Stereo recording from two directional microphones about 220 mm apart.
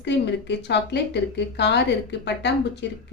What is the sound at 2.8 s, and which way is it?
Speech, 50° left (ahead or behind).